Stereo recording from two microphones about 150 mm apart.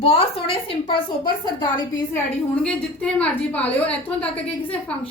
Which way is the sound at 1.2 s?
30° left (ahead or behind).